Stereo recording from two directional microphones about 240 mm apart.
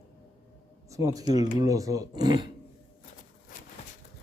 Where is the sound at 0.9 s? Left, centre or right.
Centre.